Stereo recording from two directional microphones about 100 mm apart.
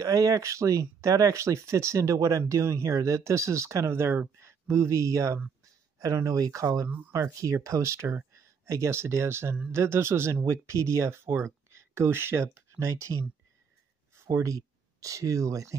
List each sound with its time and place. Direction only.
0.0 s speech: 35° right (ahead or behind)